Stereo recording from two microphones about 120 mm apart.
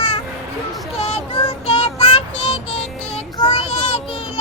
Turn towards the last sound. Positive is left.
turn(degrees=55)  # may be behind; listen again after turning